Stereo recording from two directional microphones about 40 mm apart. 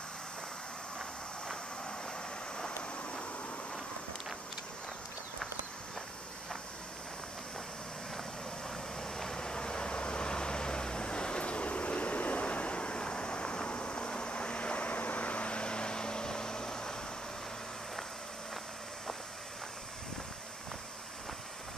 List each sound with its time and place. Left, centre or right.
2.5 s vehicle: left
8.6 s vehicle: centre